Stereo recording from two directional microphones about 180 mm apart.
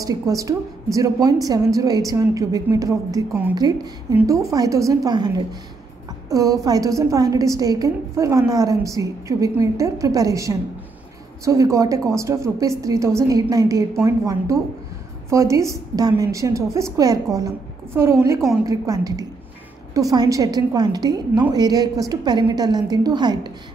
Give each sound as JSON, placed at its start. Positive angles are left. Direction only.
{"t": 0.0, "sound": "a woman's voice", "side_deg": -20}